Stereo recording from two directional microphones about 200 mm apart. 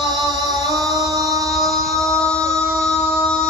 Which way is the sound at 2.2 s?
5° left (ahead or behind).